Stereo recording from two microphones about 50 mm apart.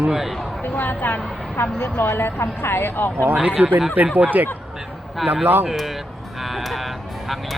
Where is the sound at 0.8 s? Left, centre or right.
Left.